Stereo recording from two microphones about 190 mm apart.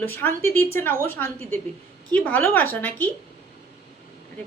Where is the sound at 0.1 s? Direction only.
10° left (ahead or behind).